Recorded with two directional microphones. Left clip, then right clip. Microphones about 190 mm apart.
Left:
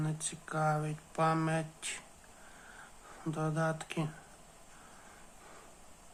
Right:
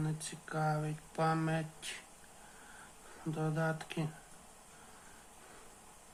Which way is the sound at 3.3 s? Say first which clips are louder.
Left 2 dB; 15° left (ahead or behind).